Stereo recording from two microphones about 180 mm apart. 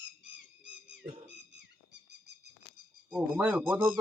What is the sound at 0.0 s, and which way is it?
Owl, 80° right.